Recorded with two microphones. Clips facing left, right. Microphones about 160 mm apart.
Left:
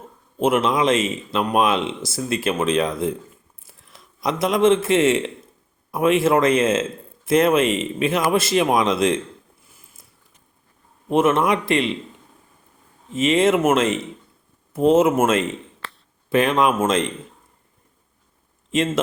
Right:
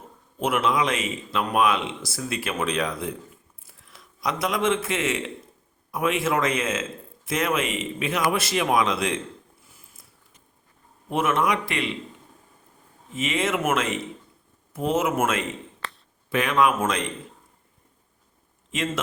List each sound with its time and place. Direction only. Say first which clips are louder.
0.3 s a man's voice: left 4 dB; 25° left (ahead or behind)
11.1 s speech: left 6 dB; 25° left (ahead or behind)
13.1 s speech: left 8 dB; 30° left (ahead or behind)